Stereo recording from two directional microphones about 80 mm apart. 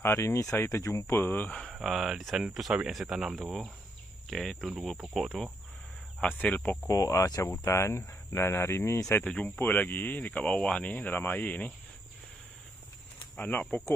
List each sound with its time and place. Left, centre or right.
0.0 s speech: left
1.7 s speech: centre
6.2 s speech: centre
6.8 s speech: left
9.2 s speech: centre
13.4 s speech: left